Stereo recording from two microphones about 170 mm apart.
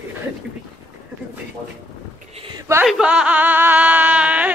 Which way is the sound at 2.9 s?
5° right (ahead or behind).